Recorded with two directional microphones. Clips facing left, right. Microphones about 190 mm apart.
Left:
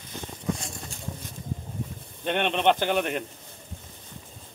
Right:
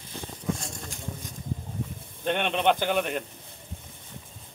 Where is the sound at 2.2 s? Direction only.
Centre (ahead or behind).